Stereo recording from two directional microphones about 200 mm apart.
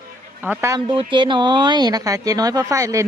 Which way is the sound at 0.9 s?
25° right (ahead or behind).